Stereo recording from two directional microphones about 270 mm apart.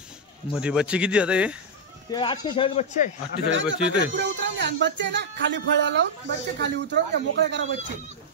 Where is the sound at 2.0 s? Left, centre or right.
Centre.